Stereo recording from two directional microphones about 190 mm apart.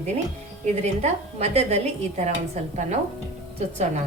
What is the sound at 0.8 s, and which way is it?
A woman's voice, 35° right (ahead or behind).